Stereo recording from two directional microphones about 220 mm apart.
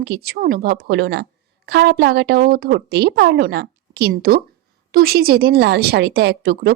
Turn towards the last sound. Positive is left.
turn(degrees=-45)  # may be behind; listen again after turning